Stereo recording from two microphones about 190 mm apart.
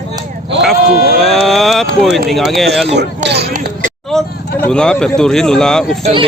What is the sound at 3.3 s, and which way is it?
Speech, 60° right (ahead or behind).